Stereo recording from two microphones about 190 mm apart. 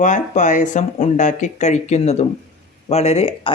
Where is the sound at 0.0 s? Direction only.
40° left (ahead or behind).